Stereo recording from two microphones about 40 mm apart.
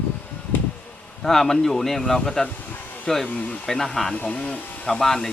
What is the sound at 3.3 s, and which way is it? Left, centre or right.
Speech, left.